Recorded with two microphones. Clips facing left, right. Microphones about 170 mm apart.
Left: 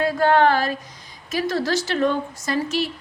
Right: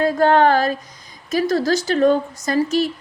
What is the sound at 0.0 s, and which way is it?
A woman's voice, 45° right (ahead or behind).